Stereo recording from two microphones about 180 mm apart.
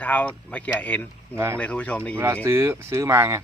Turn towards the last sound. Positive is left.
turn(degrees=-15)  # may be behind; listen again after turning